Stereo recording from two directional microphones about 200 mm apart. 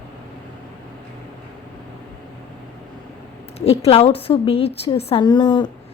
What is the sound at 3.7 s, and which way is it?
A woman's voice, 30° left (ahead or behind).